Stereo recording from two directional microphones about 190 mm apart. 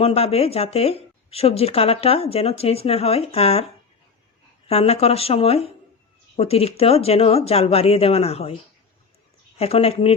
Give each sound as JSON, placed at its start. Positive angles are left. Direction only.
{"t": 0.0, "sound": "speech", "side_deg": 30}
{"t": 9.6, "sound": "speech", "side_deg": 30}